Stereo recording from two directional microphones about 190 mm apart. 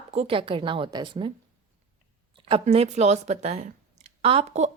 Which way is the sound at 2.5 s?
30° right (ahead or behind).